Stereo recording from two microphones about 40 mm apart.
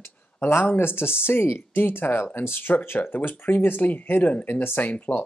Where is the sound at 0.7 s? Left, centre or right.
Left.